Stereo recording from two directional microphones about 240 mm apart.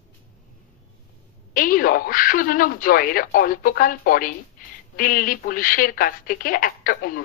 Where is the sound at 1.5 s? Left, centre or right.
Left.